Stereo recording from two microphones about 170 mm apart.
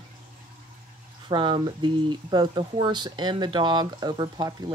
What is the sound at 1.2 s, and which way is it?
Speech, 30° right (ahead or behind).